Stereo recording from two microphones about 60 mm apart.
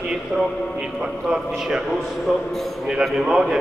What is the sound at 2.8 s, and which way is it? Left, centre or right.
Speech, centre.